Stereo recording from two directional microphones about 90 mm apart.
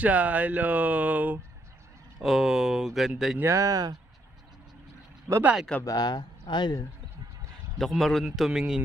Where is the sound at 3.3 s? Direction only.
30° right (ahead or behind).